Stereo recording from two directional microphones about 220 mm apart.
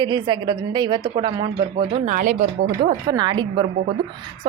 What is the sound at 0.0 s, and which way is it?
A woman's voice, 20° right (ahead or behind).